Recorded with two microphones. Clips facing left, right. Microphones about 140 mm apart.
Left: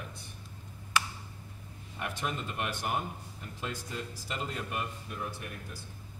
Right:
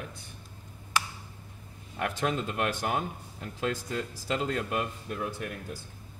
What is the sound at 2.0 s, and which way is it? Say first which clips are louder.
Speech: right 6 dB; 90° right.